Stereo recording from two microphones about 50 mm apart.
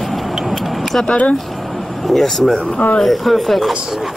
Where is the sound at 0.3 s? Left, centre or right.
Centre.